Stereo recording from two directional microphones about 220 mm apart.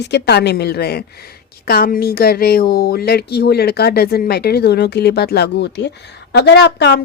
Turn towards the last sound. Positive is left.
turn(degrees=50)  # may be behind; listen again after turning